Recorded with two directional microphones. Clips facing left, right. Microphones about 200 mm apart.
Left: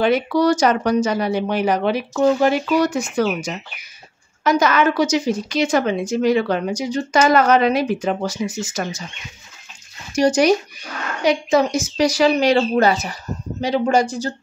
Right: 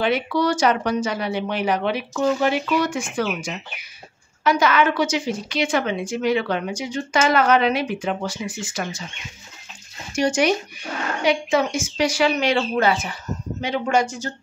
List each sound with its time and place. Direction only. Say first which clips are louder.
0.0 s a woman's voice: left 4 dB; 45° left (ahead or behind)
10.1 s a woman's voice: left 5 dB; 40° left (ahead or behind)